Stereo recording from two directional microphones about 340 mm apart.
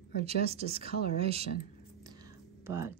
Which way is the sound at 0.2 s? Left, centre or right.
Centre.